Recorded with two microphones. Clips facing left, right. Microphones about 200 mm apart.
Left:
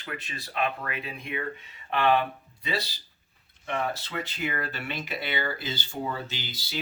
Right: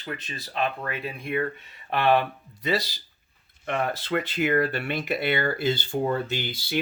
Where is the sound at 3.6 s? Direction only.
55° right (ahead or behind).